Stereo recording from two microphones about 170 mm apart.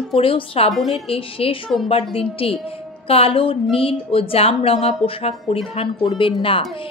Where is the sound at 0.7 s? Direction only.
Centre (ahead or behind).